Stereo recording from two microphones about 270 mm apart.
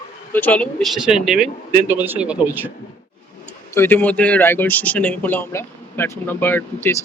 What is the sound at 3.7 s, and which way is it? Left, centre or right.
Speech, centre.